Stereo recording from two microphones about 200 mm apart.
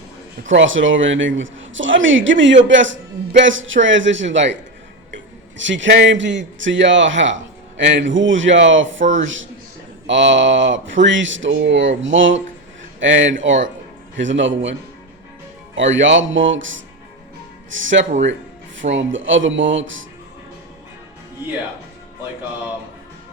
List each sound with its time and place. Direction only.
0.4 s a man's voice: 70° right (ahead or behind)
15.7 s a man's voice: 70° right (ahead or behind)